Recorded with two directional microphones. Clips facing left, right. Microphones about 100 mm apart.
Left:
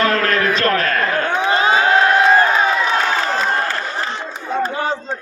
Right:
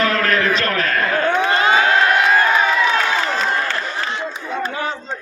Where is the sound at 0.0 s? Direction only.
35° left (ahead or behind).